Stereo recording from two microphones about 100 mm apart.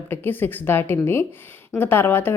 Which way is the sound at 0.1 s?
20° left (ahead or behind).